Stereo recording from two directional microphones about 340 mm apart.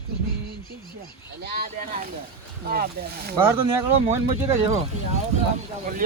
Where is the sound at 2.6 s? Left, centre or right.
Right.